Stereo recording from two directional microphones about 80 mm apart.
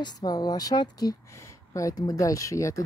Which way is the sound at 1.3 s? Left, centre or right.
Left.